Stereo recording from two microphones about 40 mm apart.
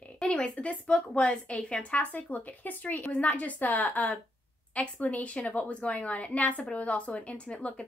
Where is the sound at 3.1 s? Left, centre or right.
Left.